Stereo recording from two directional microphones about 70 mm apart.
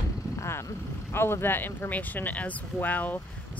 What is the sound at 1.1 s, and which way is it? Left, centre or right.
Speech, left.